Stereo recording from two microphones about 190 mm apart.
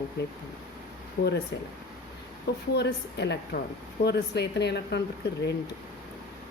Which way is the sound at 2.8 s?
65° left (ahead or behind).